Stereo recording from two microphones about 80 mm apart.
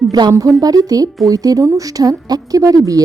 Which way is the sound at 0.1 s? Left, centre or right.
Right.